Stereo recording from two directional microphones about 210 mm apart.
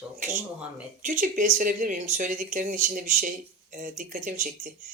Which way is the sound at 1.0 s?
40° right (ahead or behind).